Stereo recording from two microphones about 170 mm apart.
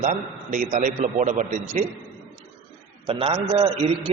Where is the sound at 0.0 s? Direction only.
50° right (ahead or behind).